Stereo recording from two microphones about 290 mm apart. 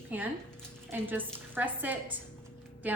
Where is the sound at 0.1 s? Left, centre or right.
Centre.